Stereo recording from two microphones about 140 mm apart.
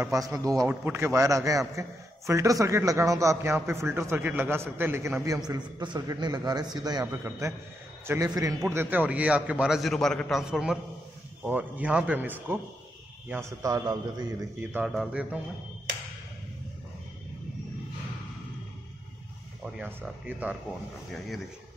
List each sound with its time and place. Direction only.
0.0 s a man's voice: 20° right (ahead or behind)
14.6 s a man's voice: 15° right (ahead or behind)
14.9 s speech: centre (ahead or behind)
20.2 s a man's voice: 10° right (ahead or behind)